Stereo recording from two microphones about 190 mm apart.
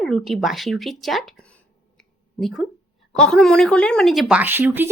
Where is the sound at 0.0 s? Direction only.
Centre (ahead or behind).